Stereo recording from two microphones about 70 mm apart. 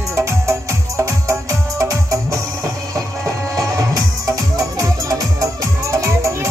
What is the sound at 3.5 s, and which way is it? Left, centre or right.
Music, right.